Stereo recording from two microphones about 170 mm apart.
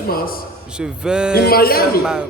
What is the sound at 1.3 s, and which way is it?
Speech, 60° left (ahead or behind).